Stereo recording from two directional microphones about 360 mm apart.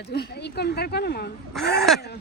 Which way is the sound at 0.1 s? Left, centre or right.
Left.